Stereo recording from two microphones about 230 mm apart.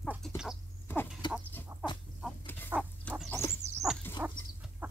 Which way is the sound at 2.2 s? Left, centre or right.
Centre.